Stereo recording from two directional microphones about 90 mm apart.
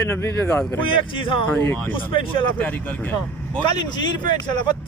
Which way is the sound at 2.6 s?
15° left (ahead or behind).